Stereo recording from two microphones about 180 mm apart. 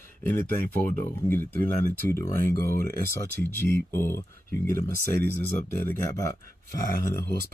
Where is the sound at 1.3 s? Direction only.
10° left (ahead or behind).